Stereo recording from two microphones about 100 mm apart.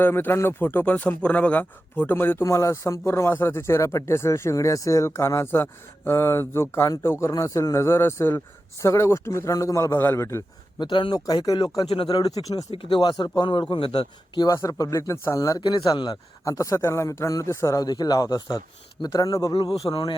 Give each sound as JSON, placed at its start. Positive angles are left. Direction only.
{"t": 0.0, "sound": "speech", "side_deg": 20}
{"t": 10.8, "sound": "speech", "side_deg": 50}
{"t": 11.9, "sound": "speech", "side_deg": 65}
{"t": 12.1, "sound": "speech", "side_deg": 40}
{"t": 12.7, "sound": "speech", "side_deg": 60}
{"t": 14.3, "sound": "speech", "side_deg": 35}
{"t": 16.4, "sound": "speech", "side_deg": 35}
{"t": 17.8, "sound": "speech", "side_deg": 40}
{"t": 19.9, "sound": "speech", "side_deg": 55}